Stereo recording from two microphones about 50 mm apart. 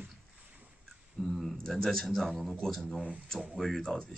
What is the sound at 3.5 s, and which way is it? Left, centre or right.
Speech, centre.